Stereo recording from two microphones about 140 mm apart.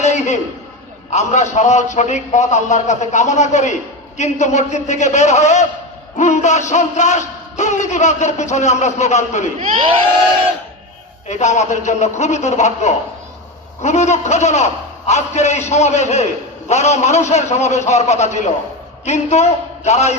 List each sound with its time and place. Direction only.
0.0 s a sound: 55° left (ahead or behind)
1.1 s speech: 55° left (ahead or behind)
11.3 s a man's voice: 55° left (ahead or behind)